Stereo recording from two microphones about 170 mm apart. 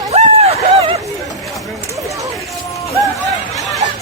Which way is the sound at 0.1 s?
40° right (ahead or behind).